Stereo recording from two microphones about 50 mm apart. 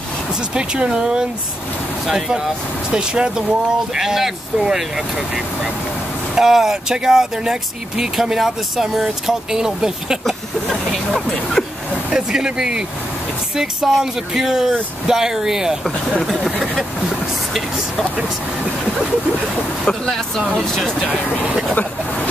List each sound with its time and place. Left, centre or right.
0.6 s speech: centre
10.9 s speech: centre
12.1 s speech: centre
16.1 s speech: centre
19.9 s speech: centre